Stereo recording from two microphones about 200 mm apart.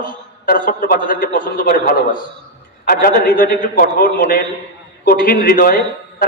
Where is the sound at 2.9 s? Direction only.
45° left (ahead or behind).